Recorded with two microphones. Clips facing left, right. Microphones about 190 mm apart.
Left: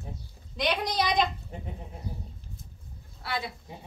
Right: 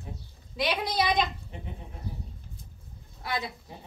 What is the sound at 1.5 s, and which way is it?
Goat, 40° left (ahead or behind).